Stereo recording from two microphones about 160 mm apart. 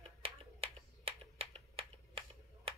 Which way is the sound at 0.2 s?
35° right (ahead or behind).